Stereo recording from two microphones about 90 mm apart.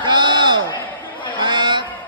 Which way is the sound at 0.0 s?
55° right (ahead or behind).